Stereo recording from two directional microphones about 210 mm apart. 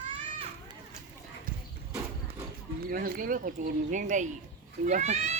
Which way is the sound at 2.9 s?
45° right (ahead or behind).